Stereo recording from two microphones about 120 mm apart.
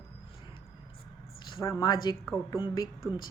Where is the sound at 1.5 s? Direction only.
30° left (ahead or behind).